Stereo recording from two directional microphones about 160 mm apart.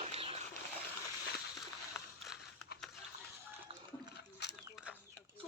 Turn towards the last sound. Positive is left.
turn(degrees=90)